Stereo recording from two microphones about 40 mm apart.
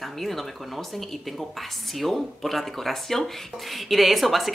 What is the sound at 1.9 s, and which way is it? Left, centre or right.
Speech, centre.